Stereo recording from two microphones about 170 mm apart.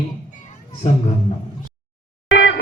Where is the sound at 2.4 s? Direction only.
90° left.